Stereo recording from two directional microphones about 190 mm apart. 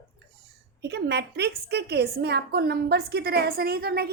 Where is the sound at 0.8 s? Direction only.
60° right (ahead or behind).